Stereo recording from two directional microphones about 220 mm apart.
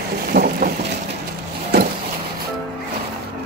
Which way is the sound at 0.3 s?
40° right (ahead or behind).